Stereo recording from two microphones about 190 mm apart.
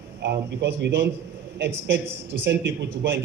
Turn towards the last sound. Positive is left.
turn(degrees=-65)  # may be behind; listen again after turning